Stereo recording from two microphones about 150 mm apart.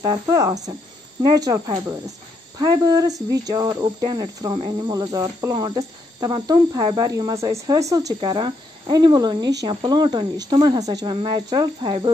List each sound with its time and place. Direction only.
0.0 s speech: 25° right (ahead or behind)